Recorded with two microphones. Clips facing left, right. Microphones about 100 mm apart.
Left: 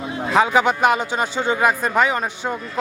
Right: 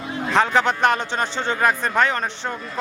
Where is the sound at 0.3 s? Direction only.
5° left (ahead or behind).